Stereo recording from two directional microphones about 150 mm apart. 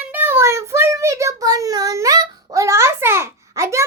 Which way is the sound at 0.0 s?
15° right (ahead or behind).